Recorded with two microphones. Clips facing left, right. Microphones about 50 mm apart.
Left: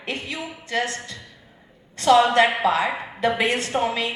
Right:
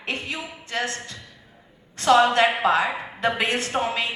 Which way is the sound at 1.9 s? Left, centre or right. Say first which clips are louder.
Left 1 dB; right.